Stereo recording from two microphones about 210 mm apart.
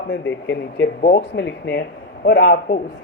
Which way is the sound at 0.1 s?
55° left (ahead or behind).